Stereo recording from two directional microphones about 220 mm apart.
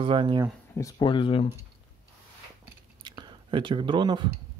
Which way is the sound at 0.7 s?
15° left (ahead or behind).